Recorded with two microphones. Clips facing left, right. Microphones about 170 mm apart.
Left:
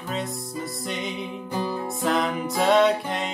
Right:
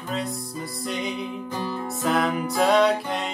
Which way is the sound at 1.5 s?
10° left (ahead or behind).